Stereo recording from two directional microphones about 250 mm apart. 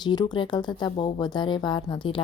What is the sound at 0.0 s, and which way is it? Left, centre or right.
Speech, centre.